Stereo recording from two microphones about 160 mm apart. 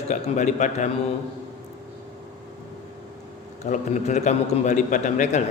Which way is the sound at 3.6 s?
45° left (ahead or behind).